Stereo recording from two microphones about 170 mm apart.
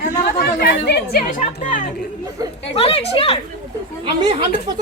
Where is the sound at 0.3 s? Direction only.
75° left (ahead or behind).